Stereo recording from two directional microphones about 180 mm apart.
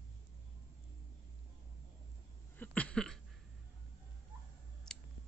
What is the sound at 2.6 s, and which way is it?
Cough, 5° left (ahead or behind).